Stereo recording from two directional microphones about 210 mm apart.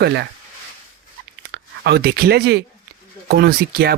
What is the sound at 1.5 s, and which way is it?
Speech, 50° right (ahead or behind).